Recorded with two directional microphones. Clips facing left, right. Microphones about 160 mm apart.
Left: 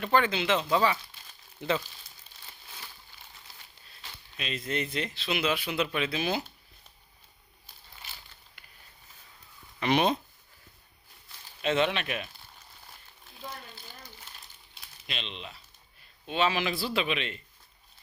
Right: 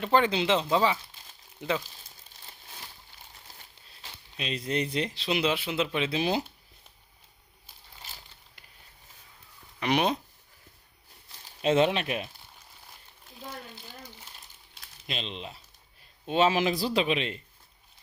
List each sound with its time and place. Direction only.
0.0 s speech: 25° right (ahead or behind)
4.0 s speech: 30° right (ahead or behind)
9.8 s speech: 10° right (ahead or behind)
11.6 s speech: 40° right (ahead or behind)
15.0 s speech: 40° right (ahead or behind)